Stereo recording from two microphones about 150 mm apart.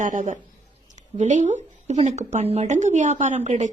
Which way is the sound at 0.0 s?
55° right (ahead or behind).